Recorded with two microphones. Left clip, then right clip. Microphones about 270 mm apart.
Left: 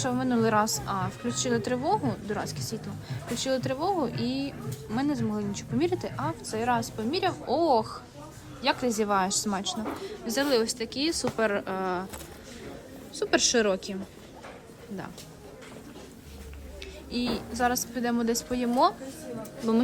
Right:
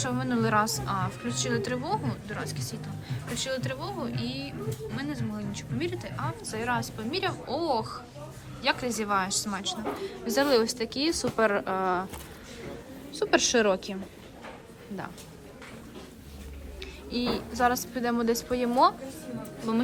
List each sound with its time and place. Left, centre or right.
0.0 s a woman's voice: centre
13.1 s a woman's voice: centre
16.8 s a woman's voice: centre